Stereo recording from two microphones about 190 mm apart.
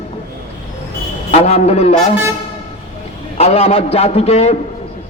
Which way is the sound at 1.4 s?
35° left (ahead or behind).